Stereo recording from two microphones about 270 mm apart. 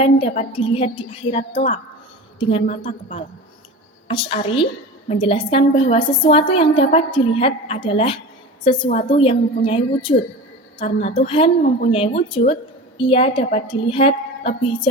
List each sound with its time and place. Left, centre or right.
0.0 s a woman's voice: left